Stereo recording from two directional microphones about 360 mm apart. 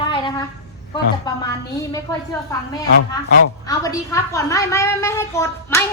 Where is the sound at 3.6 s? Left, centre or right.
Centre.